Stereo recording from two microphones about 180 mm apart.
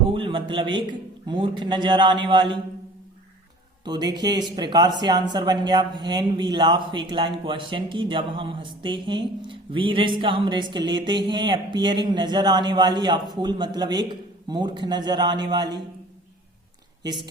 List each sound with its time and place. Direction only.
0.1 s a sound: 30° right (ahead or behind)
1.3 s speech: 25° right (ahead or behind)
3.8 s speech: 25° right (ahead or behind)